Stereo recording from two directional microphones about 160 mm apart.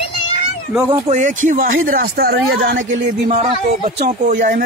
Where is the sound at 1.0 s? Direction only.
50° right (ahead or behind); by 3.1 s 75° right (ahead or behind).